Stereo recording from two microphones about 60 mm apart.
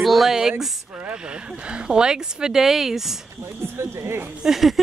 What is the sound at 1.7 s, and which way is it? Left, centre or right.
Speech, centre.